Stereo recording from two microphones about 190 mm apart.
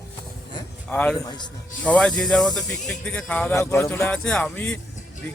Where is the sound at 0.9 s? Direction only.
5° left (ahead or behind).